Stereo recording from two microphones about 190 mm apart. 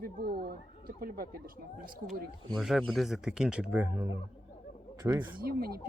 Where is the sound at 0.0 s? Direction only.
55° right (ahead or behind).